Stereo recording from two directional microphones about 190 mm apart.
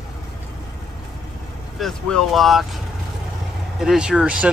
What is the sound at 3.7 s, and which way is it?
Speech, 5° right (ahead or behind).